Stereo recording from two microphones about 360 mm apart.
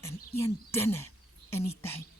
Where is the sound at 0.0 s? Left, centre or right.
Centre.